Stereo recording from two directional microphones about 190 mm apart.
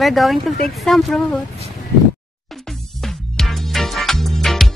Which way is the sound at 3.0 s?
Centre (ahead or behind).